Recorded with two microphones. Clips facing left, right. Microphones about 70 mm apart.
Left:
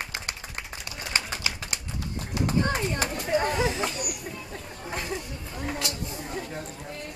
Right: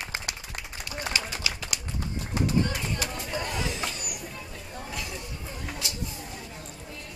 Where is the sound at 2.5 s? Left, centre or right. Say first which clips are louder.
Left 3 dB; left.